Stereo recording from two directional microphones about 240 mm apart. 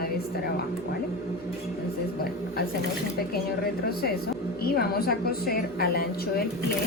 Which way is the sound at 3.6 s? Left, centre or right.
Left.